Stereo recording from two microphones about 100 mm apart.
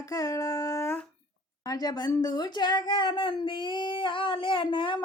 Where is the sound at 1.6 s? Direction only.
40° left (ahead or behind).